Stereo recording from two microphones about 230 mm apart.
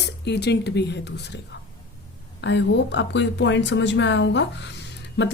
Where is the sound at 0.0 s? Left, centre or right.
Left.